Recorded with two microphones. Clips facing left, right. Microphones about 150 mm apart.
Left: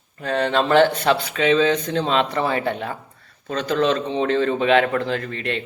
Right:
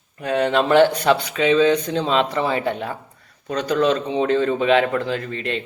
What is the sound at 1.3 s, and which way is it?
Speech, 45° left (ahead or behind).